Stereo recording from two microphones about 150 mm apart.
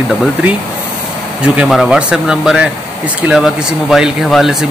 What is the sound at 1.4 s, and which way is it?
Speech, 10° right (ahead or behind).